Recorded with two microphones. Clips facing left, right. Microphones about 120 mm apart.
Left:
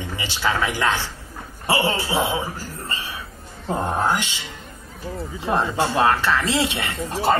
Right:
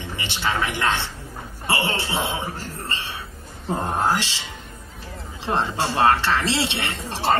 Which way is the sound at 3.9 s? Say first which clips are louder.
Even; 30° right (ahead or behind).